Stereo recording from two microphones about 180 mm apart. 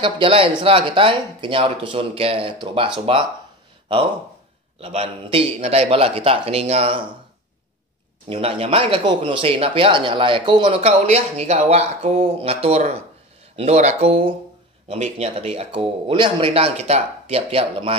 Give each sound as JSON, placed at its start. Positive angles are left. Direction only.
{"t": 0.0, "sound": "speech", "side_deg": -30}
{"t": 4.7, "sound": "speech", "side_deg": -35}
{"t": 8.3, "sound": "speech", "side_deg": -30}